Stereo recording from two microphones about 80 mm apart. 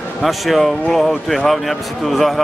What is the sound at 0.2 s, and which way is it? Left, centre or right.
Speech, centre.